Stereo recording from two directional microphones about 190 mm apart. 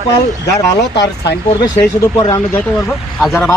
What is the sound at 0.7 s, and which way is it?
Speech, 65° left (ahead or behind).